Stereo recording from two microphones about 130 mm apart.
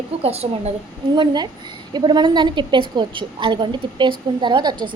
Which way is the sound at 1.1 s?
35° right (ahead or behind).